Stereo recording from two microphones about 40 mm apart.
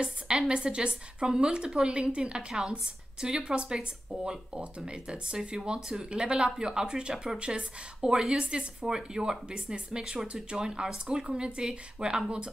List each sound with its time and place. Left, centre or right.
0.0 s a woman's voice: centre
8.0 s a woman's voice: centre